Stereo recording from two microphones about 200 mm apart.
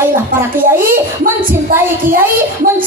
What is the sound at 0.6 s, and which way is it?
Speech, 45° right (ahead or behind).